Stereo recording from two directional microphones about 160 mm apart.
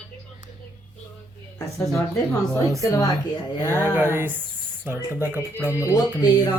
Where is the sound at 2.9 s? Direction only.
25° left (ahead or behind).